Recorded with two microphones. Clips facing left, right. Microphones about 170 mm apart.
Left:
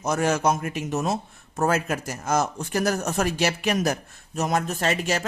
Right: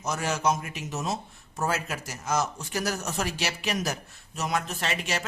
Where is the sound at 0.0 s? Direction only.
50° left (ahead or behind).